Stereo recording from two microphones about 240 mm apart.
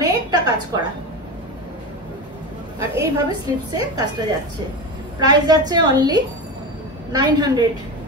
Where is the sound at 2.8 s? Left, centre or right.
Centre.